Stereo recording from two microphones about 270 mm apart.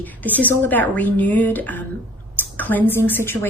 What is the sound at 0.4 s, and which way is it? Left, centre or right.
A woman's voice, centre.